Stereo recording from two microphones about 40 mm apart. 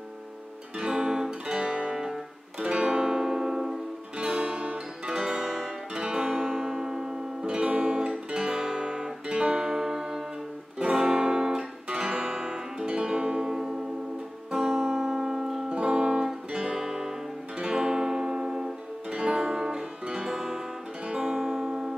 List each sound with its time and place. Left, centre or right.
0.7 s guitar: centre
2.6 s music: right; by 3.8 s centre
4.2 s music: right
5.1 s guitar: centre
5.9 s music: right
7.4 s guitar: right
9.6 s music: centre
11.1 s guitar: centre
12.8 s music: right; by 15.6 s centre
15.7 s music: right